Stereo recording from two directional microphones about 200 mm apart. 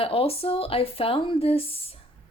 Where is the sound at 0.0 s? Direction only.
30° left (ahead or behind).